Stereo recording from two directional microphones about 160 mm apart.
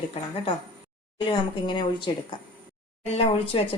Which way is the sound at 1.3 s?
30° left (ahead or behind).